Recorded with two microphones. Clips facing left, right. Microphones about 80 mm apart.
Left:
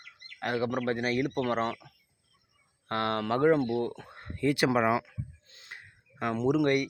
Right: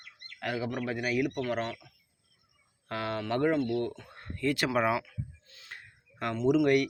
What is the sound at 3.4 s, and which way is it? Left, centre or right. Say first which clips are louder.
Speech: left 4 dB; left.